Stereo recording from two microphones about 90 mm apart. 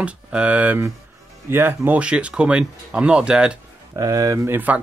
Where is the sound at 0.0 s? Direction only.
15° right (ahead or behind).